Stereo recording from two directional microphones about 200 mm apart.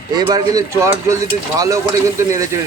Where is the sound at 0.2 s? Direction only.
20° right (ahead or behind).